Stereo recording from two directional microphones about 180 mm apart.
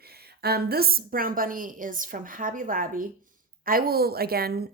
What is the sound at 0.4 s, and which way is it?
A woman's voice, 60° right (ahead or behind).